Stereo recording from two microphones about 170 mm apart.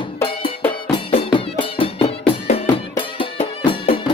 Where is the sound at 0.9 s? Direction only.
30° left (ahead or behind).